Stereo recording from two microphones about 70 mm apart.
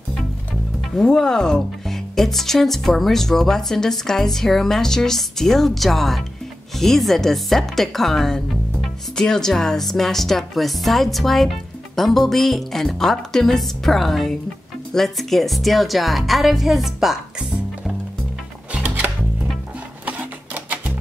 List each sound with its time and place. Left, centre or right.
0.9 s speech: centre
18.7 s music: centre